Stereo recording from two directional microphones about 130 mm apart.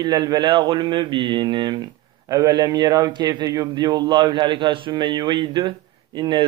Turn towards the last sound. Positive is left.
turn(degrees=-35)  # may be behind; listen again after turning